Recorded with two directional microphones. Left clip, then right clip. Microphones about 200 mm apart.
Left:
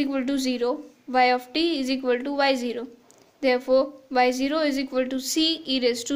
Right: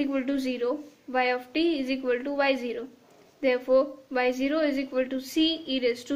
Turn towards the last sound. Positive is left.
turn(degrees=45)  # may be behind; listen again after turning